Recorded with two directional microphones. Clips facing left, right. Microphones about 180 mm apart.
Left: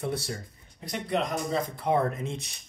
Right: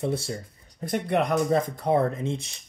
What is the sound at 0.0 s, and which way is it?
Speech, 25° right (ahead or behind).